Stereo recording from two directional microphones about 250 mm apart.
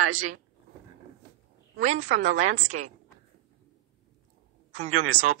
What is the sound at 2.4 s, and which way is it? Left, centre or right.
Speech, right.